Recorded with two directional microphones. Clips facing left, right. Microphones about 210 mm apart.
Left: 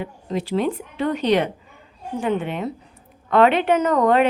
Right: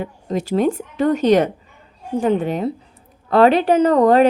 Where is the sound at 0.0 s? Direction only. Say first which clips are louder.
Right 3 dB; 45° right (ahead or behind).